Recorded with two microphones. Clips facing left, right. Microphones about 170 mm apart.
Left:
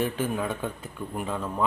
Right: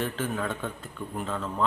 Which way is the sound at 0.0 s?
10° left (ahead or behind).